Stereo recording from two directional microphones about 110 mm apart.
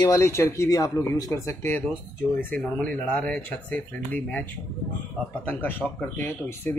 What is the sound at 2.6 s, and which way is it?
Speech, 5° left (ahead or behind).